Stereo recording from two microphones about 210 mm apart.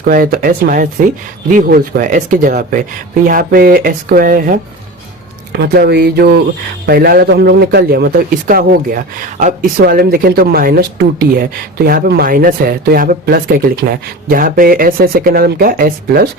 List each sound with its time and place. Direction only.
0.0 s speech: 45° right (ahead or behind)